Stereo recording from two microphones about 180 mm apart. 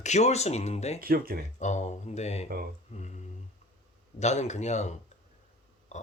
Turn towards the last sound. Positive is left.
turn(degrees=40)  # may be behind; listen again after turning